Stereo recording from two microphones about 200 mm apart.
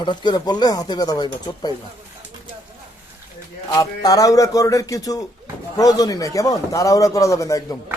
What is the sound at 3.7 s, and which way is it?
A man's voice, 15° left (ahead or behind).